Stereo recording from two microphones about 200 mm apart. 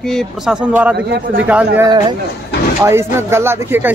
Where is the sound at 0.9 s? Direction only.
55° right (ahead or behind).